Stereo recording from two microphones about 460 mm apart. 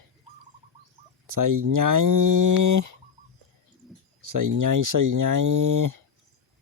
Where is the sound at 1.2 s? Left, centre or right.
Right.